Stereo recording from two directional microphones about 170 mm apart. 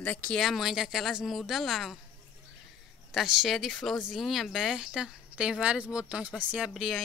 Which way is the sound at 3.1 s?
Centre (ahead or behind).